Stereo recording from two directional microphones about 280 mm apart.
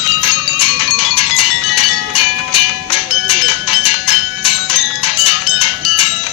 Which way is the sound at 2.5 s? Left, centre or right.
Centre.